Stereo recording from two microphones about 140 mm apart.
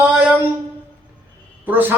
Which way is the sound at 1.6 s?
15° right (ahead or behind).